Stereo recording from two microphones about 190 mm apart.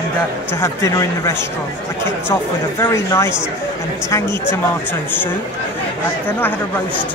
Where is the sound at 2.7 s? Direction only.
15° left (ahead or behind).